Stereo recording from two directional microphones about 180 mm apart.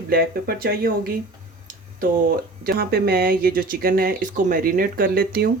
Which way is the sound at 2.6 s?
55° right (ahead or behind).